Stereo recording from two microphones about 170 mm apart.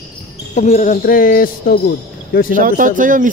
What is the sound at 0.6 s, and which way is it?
A man's voice, 45° left (ahead or behind).